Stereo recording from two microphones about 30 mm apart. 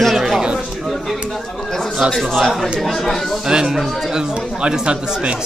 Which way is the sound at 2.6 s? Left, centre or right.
Centre.